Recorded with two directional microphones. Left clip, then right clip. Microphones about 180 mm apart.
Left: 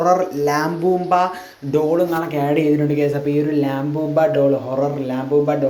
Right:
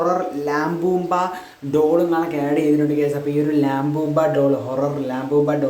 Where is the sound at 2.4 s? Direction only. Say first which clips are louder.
Left 3 dB; 15° left (ahead or behind).